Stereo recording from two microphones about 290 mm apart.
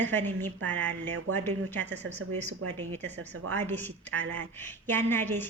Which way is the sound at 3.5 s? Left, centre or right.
Centre.